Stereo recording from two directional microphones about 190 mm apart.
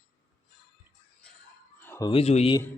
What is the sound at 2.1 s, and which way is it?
Speech, 35° left (ahead or behind).